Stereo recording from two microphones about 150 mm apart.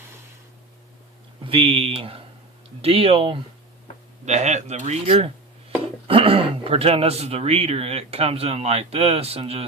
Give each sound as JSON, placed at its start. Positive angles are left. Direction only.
{"t": 1.5, "sound": "speech", "side_deg": -40}
{"t": 4.3, "sound": "speech", "side_deg": -50}